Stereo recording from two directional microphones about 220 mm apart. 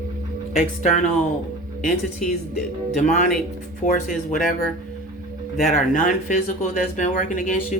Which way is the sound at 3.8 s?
35° left (ahead or behind).